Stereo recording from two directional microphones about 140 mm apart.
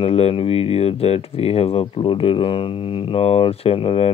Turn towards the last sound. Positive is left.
turn(degrees=40)  # may be behind; listen again after turning